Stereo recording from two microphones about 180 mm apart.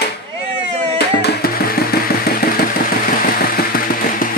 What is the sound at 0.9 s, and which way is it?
Music, 65° left (ahead or behind).